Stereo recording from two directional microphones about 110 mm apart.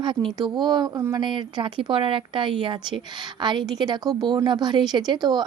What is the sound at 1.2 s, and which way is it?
A woman's voice, 45° right (ahead or behind).